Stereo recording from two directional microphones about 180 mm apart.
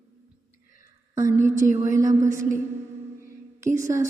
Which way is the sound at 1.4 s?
45° right (ahead or behind).